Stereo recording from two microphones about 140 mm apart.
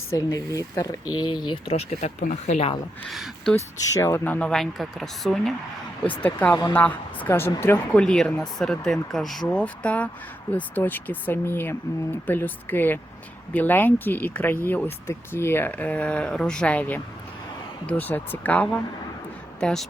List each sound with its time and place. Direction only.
0.1 s speech: 25° left (ahead or behind)
1.5 s speech: 45° left (ahead or behind)
3.1 s speech: centre (ahead or behind)
3.5 s speech: 20° left (ahead or behind)
6.5 s speech: 25° left (ahead or behind)
6.7 s speech: 15° left (ahead or behind)
8.0 s speech: 5° left (ahead or behind)